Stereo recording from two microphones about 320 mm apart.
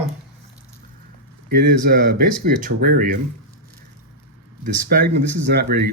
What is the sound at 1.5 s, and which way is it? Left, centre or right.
Speech, right.